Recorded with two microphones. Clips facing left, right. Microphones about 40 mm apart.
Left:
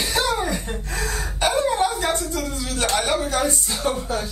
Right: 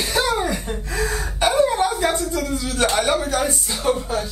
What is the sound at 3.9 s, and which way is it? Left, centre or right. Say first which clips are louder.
Speech: right 2 dB; centre.